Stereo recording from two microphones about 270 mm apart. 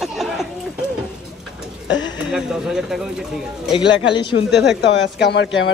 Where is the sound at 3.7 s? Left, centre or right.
Centre.